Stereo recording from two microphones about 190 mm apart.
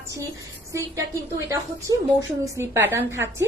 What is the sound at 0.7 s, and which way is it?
A woman's voice, 15° right (ahead or behind).